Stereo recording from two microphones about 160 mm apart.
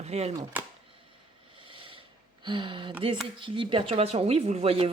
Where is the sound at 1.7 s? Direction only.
35° right (ahead or behind).